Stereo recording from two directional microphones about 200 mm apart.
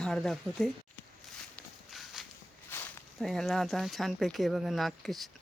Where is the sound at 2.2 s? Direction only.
Centre (ahead or behind).